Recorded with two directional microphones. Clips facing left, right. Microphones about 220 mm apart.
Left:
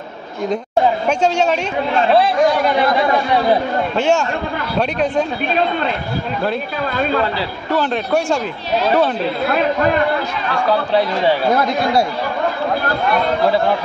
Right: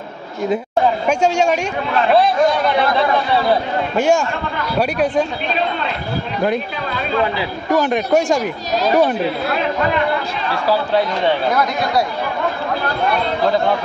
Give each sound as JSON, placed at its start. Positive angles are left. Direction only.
{"t": 1.0, "sound": "speech", "side_deg": -10}
{"t": 3.9, "sound": "speech", "side_deg": -10}
{"t": 7.3, "sound": "speech", "side_deg": -15}